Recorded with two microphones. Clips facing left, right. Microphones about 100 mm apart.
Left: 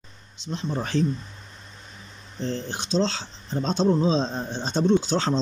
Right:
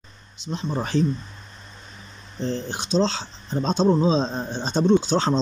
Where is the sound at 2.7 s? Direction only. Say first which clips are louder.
Right 2 dB; 15° right (ahead or behind).